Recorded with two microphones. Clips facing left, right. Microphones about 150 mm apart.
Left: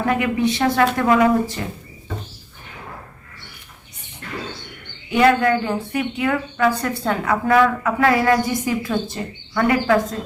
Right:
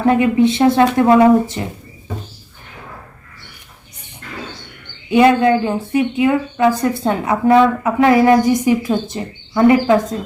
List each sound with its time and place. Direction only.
0.0 s speech: 25° right (ahead or behind)
5.1 s speech: 20° right (ahead or behind)